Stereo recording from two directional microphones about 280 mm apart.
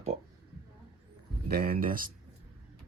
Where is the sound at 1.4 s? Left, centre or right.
Right.